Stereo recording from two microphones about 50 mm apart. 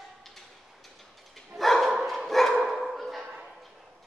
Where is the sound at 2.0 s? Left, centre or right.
Centre.